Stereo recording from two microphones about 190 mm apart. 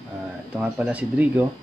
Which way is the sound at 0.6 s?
10° right (ahead or behind).